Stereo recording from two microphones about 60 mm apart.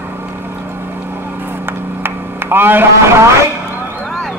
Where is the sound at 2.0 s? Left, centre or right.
Right.